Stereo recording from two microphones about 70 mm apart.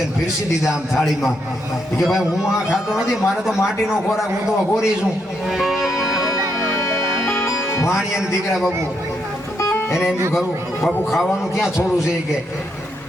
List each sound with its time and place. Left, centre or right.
0.6 s a man's voice: centre
5.5 s music: centre
7.4 s speech: centre
9.6 s music: left
10.8 s a man's voice: centre